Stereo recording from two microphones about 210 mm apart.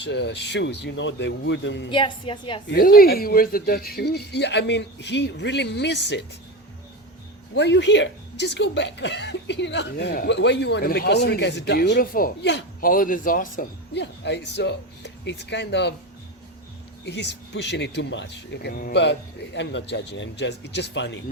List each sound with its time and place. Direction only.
0.0 s speech: 55° left (ahead or behind)
1.9 s a woman's voice: 25° left (ahead or behind)
2.6 s speech: 45° left (ahead or behind)
7.5 s speech: 55° left (ahead or behind)
17.1 s speech: 55° left (ahead or behind)